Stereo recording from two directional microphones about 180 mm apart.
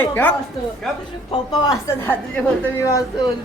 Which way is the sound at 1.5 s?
20° left (ahead or behind).